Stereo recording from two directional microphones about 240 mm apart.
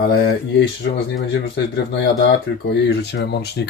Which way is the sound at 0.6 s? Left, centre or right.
Left.